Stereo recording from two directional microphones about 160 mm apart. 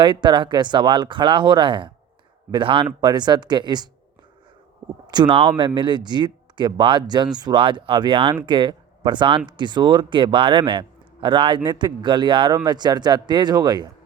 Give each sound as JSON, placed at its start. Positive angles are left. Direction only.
{"t": 0.0, "sound": "a man's voice", "side_deg": -30}
{"t": 5.1, "sound": "a man's voice", "side_deg": -30}